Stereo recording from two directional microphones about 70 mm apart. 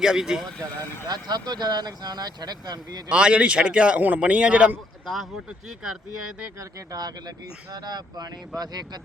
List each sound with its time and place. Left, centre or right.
0.0 s speech: centre
1.0 s speech: right
3.1 s speech: centre
5.0 s speech: centre
6.6 s speech: right
7.0 s speech: right